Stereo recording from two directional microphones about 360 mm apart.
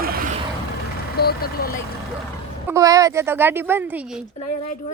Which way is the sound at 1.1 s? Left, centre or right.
Left.